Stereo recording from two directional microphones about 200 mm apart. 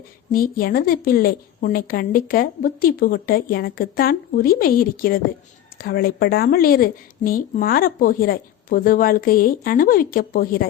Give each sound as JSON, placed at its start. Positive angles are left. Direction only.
{"t": 0.3, "sound": "a woman's voice", "side_deg": 45}